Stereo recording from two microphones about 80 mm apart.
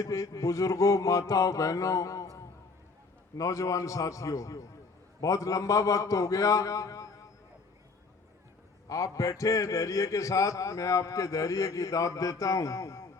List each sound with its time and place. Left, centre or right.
0.0 s a man's voice: left
8.9 s a man's voice: left